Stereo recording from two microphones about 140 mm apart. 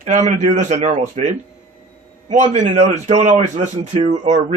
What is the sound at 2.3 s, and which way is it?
A man's voice, 60° right (ahead or behind).